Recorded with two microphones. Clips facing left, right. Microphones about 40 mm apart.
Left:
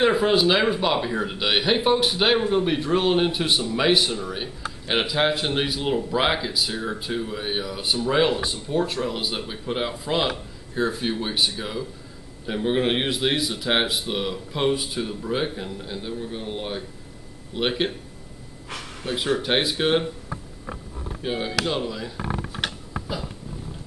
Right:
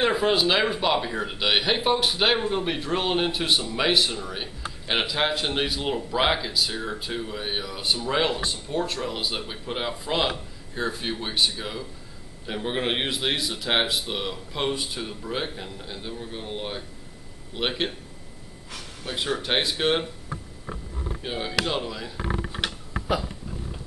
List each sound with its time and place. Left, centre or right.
0.0 s speech: centre
19.2 s speech: centre
21.2 s speech: centre